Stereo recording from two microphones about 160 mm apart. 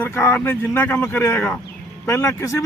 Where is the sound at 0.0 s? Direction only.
15° left (ahead or behind).